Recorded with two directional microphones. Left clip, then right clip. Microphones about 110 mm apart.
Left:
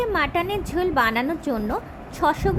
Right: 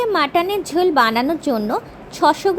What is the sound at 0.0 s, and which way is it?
A woman's voice, 40° right (ahead or behind).